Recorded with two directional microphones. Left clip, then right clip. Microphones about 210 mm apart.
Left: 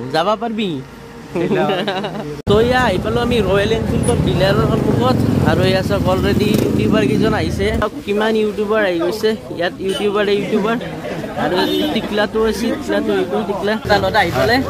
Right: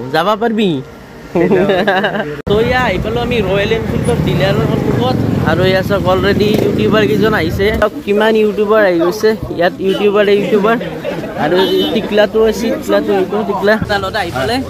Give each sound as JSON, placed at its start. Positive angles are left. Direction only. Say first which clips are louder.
{"t": 0.1, "sound": "speech", "louder": "right 3 dB", "side_deg": -5}
{"t": 0.4, "sound": "a man's voice", "louder": "right 7 dB", "side_deg": -20}
{"t": 1.4, "sound": "speech", "louder": "right 5 dB", "side_deg": 5}
{"t": 1.7, "sound": "speech", "louder": "right 7 dB", "side_deg": -10}
{"t": 2.6, "sound": "speech", "louder": "right 1 dB", "side_deg": 15}
{"t": 5.4, "sound": "speech", "louder": "right 5 dB", "side_deg": 0}